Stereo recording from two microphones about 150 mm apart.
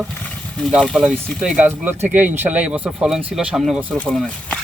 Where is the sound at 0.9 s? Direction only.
5° right (ahead or behind).